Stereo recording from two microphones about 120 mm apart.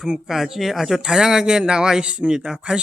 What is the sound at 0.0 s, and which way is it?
Speech, 5° right (ahead or behind).